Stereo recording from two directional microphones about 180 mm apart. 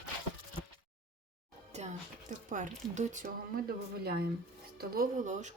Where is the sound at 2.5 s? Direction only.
45° right (ahead or behind).